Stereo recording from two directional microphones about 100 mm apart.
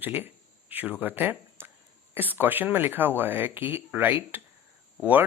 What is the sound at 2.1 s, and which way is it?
Speech, 20° right (ahead or behind).